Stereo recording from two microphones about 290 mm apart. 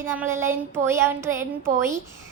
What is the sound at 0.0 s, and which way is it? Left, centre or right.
A child's voice, centre.